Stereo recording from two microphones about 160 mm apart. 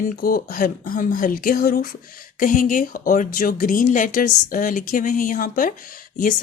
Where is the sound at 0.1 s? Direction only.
60° left (ahead or behind).